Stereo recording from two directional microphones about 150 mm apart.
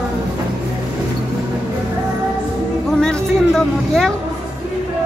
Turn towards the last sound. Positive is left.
turn(degrees=5)  # may be behind; listen again after turning